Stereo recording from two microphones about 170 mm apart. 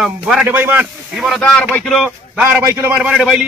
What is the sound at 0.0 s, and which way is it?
A man's voice, 5° right (ahead or behind).